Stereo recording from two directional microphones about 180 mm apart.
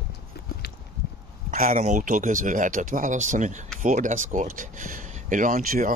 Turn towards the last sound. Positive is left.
turn(degrees=-50)  # may be behind; listen again after turning